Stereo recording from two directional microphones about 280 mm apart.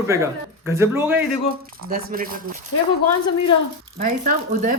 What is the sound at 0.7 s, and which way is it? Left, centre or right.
Speech, centre.